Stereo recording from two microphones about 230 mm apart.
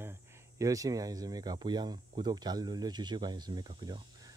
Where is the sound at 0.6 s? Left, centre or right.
Centre.